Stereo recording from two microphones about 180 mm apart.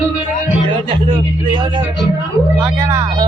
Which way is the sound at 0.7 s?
25° right (ahead or behind).